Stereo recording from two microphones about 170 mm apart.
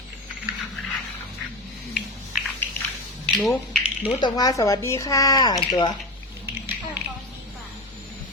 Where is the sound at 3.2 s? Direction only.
10° left (ahead or behind).